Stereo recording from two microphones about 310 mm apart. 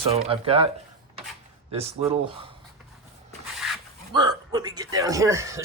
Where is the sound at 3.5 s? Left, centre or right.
Centre.